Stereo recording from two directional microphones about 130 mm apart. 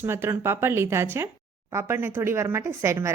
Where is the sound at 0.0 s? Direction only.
20° right (ahead or behind).